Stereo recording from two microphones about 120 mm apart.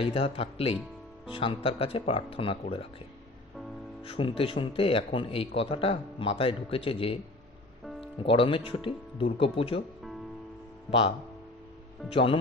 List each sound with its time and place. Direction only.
0.0 s speech: 50° left (ahead or behind)
4.0 s speech: 50° left (ahead or behind)
8.2 s speech: 50° left (ahead or behind)
10.9 s speech: 50° left (ahead or behind)